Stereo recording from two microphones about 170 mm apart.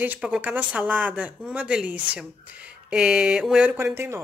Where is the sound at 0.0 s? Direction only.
10° right (ahead or behind).